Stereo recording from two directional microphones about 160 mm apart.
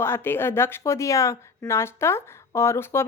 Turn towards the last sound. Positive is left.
turn(degrees=15)  # may be behind; listen again after turning